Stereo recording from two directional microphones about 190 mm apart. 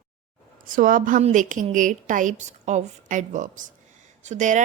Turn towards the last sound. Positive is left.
turn(degrees=-40)  # may be behind; listen again after turning